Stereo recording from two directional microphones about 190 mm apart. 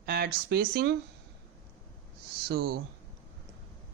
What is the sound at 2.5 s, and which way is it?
Speech, 55° right (ahead or behind).